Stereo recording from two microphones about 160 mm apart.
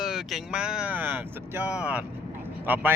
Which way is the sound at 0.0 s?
Centre (ahead or behind).